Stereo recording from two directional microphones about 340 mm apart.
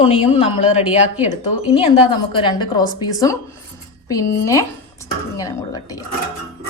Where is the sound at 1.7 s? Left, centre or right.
Centre.